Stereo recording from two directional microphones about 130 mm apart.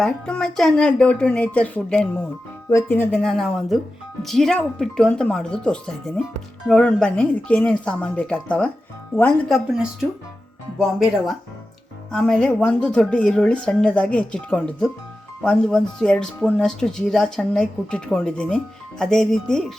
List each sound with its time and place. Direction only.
0.0 s a woman's voice: 5° left (ahead or behind)
2.6 s a woman's voice: 20° left (ahead or behind)
3.2 s a woman's voice: 5° left (ahead or behind)
10.8 s a woman's voice: centre (ahead or behind)